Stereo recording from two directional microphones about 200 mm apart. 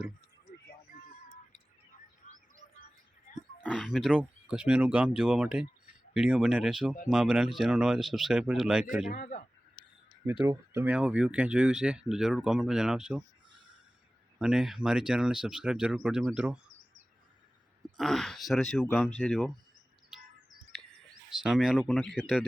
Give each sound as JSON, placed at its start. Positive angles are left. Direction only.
{"t": 2.2, "sound": "chirp", "side_deg": 35}
{"t": 3.6, "sound": "speech", "side_deg": 0}
{"t": 9.0, "sound": "a man's voice", "side_deg": 40}
{"t": 10.4, "sound": "speech", "side_deg": -15}
{"t": 14.3, "sound": "speech", "side_deg": -5}
{"t": 17.9, "sound": "speech", "side_deg": 0}
{"t": 20.7, "sound": "bird", "side_deg": 5}
{"t": 21.2, "sound": "speech", "side_deg": -5}